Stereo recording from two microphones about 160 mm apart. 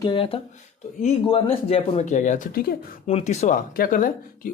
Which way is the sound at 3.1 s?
40° left (ahead or behind).